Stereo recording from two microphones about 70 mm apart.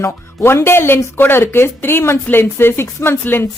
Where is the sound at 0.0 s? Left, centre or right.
Left.